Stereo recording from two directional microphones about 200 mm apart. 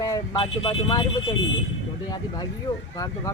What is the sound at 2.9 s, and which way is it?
Speech, 15° left (ahead or behind).